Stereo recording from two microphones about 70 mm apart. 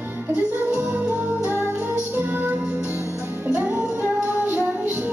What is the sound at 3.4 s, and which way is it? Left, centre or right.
Music, right.